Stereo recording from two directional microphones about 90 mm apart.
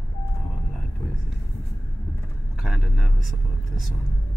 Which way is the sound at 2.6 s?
Centre (ahead or behind).